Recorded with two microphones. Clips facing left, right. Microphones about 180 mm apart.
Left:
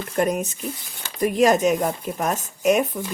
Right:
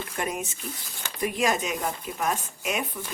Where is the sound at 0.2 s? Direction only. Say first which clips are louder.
Left 10 dB; 40° left (ahead or behind).